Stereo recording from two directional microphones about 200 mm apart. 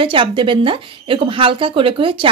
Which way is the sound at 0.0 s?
25° right (ahead or behind).